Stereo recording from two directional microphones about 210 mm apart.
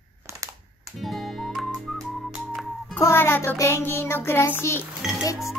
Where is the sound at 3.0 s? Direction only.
10° left (ahead or behind).